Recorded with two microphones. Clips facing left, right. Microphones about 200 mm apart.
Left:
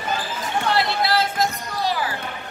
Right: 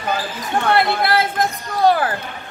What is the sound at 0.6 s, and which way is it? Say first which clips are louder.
Speech: right 5 dB; 55° right (ahead or behind).